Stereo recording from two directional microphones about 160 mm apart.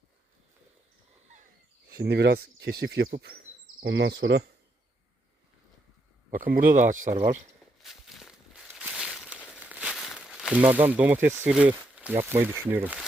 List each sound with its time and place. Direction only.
1.9 s speech: 80° right
3.8 s speech: 90° right
6.3 s speech: 60° right (ahead or behind)
7.8 s walk: centre (ahead or behind)
8.6 s crumpling: 5° right (ahead or behind)
11.0 s speech: 10° right (ahead or behind)